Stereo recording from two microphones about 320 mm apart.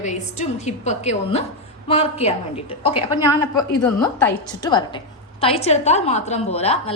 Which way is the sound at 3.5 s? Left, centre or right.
Centre.